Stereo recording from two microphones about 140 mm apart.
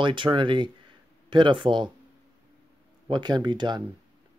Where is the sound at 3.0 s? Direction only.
30° right (ahead or behind).